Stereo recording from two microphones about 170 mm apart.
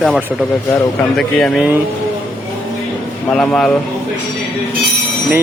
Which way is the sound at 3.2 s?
5° left (ahead or behind).